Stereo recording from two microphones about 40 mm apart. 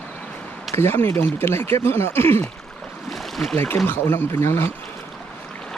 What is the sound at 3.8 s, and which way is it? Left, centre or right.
Speech, left.